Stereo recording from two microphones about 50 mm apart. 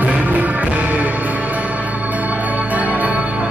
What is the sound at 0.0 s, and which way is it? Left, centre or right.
Music, right.